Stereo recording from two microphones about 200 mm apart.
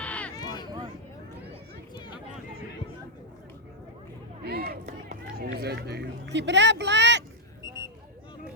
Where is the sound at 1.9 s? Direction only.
20° left (ahead or behind).